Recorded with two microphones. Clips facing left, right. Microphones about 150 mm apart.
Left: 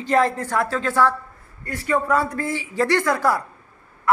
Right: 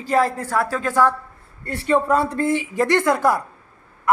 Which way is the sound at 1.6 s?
30° right (ahead or behind).